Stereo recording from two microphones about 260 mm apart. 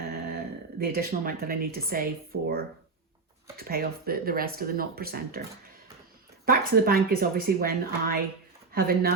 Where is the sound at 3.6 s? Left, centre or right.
Right.